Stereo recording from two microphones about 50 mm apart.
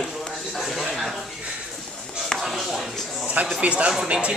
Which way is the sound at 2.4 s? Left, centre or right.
Centre.